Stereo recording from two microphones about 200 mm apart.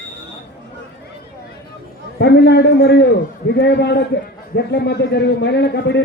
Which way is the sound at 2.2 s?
55° left (ahead or behind).